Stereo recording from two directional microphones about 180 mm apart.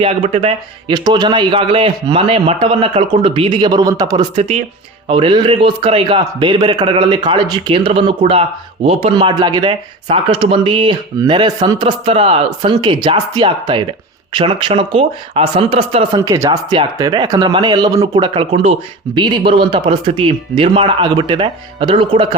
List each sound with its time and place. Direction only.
0.0 s a man's voice: 30° right (ahead or behind)
16.2 s a man's voice: 20° right (ahead or behind)